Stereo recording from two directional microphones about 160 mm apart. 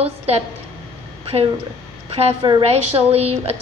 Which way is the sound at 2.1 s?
35° right (ahead or behind).